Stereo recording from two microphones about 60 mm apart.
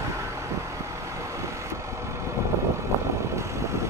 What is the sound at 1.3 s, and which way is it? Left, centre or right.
Vehicle, right.